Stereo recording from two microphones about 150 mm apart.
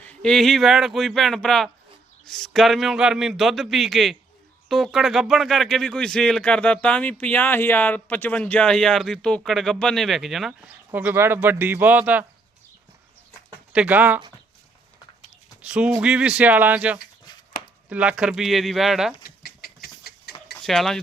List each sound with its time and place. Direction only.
0.0 s speech: 5° left (ahead or behind)
10.9 s speech: 15° right (ahead or behind)
13.7 s speech: 10° right (ahead or behind)
15.6 s speech: 5° right (ahead or behind)
17.3 s a sound: 30° left (ahead or behind)
17.8 s speech: 10° right (ahead or behind)
19.2 s a sound: 90° left
20.6 s speech: centre (ahead or behind)